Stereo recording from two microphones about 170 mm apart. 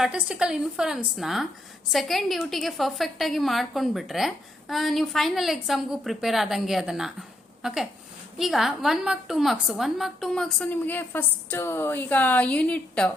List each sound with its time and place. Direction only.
0.0 s a woman's voice: 5° right (ahead or behind)